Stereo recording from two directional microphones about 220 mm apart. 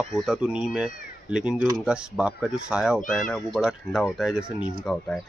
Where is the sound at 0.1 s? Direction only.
5° right (ahead or behind).